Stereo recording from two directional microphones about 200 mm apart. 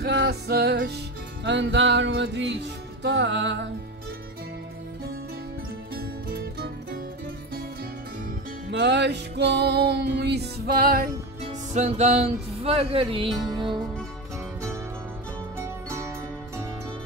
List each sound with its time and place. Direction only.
0.0 s music: 55° right (ahead or behind)
5.9 s music: 50° right (ahead or behind)
8.6 s music: 60° right (ahead or behind)
11.4 s speech: 35° right (ahead or behind)
15.6 s music: 15° right (ahead or behind)